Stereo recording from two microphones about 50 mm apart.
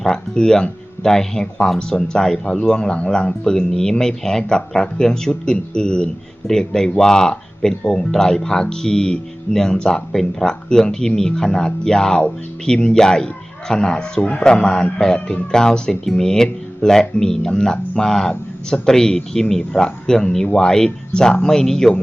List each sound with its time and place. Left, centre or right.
0.0 s speech: centre
14.2 s speech: left
14.4 s speech: centre